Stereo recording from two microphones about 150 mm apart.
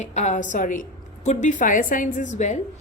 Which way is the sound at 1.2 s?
55° left (ahead or behind).